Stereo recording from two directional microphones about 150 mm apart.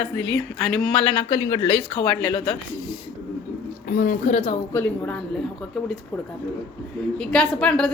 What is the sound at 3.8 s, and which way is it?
Speech, 65° left (ahead or behind).